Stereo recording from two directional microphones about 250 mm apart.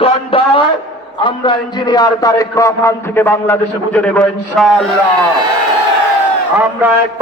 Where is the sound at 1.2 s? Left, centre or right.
Centre.